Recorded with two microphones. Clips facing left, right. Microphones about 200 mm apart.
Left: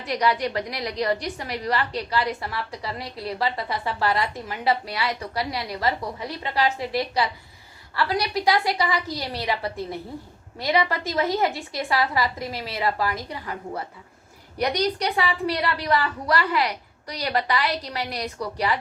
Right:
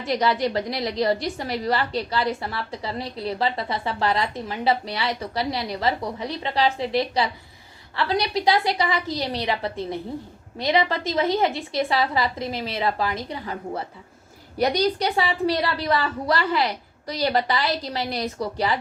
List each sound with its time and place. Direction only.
0.0 s a woman's voice: 25° right (ahead or behind)